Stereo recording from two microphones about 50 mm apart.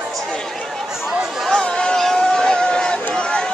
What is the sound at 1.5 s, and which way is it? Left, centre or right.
Chatter, centre.